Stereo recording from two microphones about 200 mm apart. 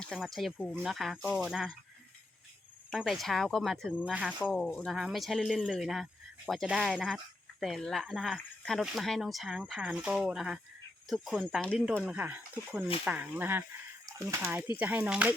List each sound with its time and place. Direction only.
0.0 s speech: centre (ahead or behind)
2.9 s speech: centre (ahead or behind)